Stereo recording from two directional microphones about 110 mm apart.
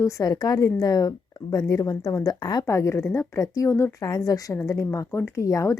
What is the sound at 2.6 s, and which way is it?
Speech, 25° left (ahead or behind).